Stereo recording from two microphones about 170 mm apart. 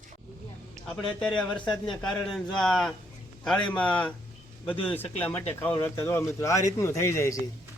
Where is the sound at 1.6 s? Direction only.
30° left (ahead or behind).